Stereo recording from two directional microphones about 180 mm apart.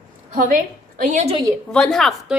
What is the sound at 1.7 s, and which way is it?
Speech, 5° left (ahead or behind).